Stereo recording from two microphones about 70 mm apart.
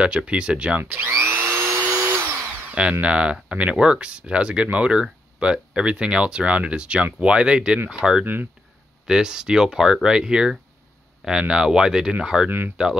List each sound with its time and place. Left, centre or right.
0.0 s speech: centre
0.8 s speech: right
1.2 s drill: right
2.7 s speech: centre
12.4 s speech: right